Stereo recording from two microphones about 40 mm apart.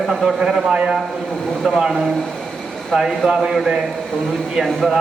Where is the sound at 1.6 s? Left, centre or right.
Centre.